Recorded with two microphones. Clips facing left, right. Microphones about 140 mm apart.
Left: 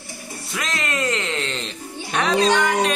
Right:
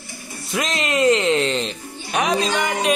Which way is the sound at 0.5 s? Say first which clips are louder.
Right 4 dB; 20° right (ahead or behind).